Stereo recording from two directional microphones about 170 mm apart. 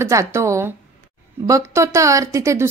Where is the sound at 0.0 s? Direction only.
15° right (ahead or behind).